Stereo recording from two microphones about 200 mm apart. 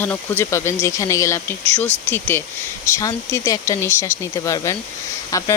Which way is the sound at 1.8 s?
35° left (ahead or behind).